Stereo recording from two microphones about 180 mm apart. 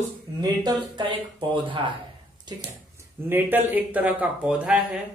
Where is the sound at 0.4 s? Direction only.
20° right (ahead or behind).